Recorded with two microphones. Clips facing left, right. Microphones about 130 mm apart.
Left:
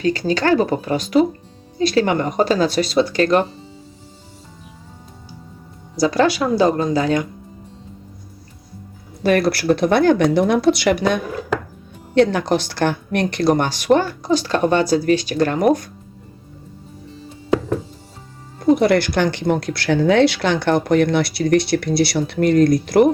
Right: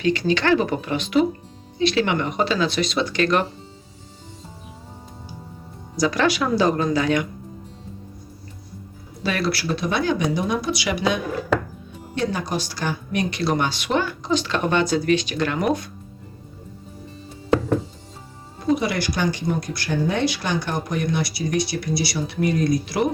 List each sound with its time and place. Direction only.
0.0 s speech: 40° left (ahead or behind)
6.0 s speech: 30° left (ahead or behind)
9.2 s speech: 50° left (ahead or behind)
12.1 s speech: 65° left (ahead or behind); by 15.9 s 40° left (ahead or behind)
18.8 s speech: 60° left (ahead or behind)